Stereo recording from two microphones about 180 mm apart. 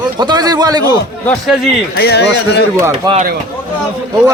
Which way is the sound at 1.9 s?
65° left (ahead or behind).